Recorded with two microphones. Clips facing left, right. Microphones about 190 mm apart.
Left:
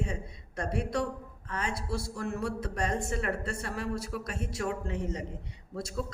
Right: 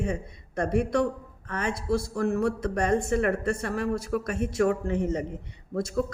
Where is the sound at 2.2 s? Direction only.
45° right (ahead or behind).